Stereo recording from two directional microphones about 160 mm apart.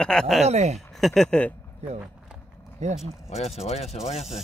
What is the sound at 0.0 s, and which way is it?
Speech, 5° left (ahead or behind).